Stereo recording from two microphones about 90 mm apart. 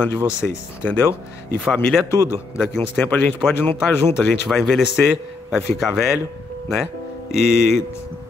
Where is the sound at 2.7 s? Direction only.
15° left (ahead or behind).